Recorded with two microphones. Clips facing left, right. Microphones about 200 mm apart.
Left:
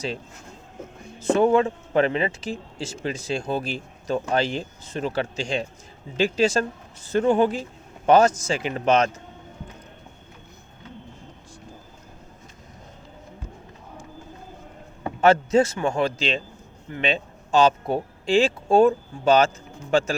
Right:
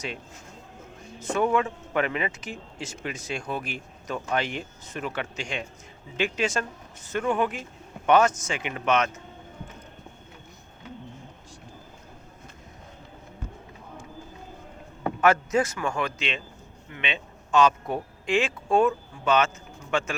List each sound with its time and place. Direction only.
1.2 s speech: 30° left (ahead or behind)
15.2 s a man's voice: 30° left (ahead or behind)